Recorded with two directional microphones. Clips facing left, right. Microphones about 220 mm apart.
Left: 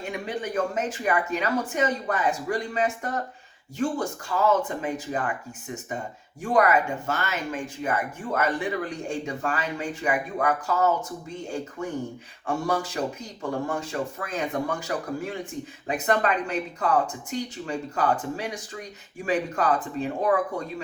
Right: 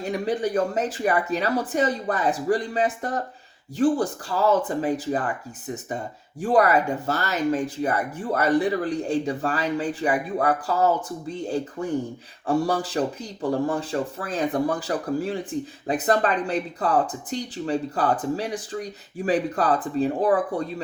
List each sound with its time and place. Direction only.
0.0 s speech: 35° right (ahead or behind)
6.4 s speech: 35° right (ahead or behind)